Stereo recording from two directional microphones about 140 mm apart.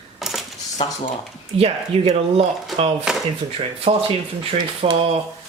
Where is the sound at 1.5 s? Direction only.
50° right (ahead or behind).